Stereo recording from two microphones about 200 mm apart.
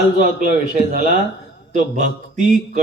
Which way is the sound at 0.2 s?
40° right (ahead or behind).